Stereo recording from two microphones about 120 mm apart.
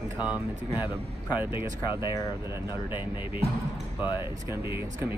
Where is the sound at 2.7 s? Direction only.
45° left (ahead or behind).